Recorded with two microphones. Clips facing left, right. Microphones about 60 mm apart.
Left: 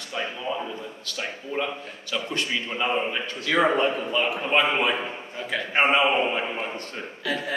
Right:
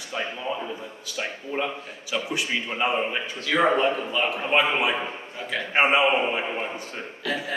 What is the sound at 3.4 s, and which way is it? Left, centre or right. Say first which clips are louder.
A man's voice: even; centre.